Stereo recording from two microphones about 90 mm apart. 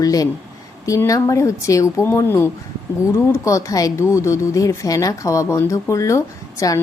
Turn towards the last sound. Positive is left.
turn(degrees=40)  # may be behind; listen again after turning